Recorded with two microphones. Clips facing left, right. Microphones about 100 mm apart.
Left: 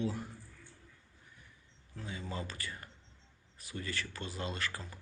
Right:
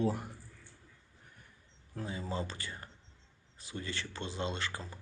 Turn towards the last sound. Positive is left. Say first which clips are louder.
# right 2 dB
turn(degrees=-30)  # may be behind; listen again after turning